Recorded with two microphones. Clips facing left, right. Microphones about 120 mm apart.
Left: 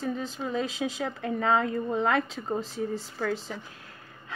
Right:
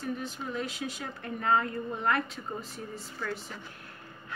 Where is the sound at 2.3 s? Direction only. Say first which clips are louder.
Left 8 dB; 90° left.